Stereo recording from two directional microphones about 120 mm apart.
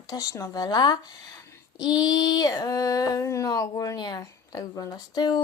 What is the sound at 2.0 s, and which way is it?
A woman's voice, 30° left (ahead or behind).